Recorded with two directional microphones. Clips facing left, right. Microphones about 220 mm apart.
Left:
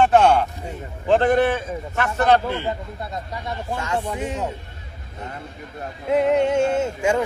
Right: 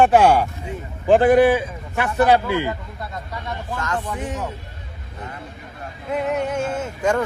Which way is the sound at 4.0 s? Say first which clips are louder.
Left 2 dB; 25° left (ahead or behind).